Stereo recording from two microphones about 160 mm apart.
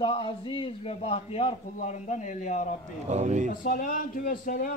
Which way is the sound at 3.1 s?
45° right (ahead or behind).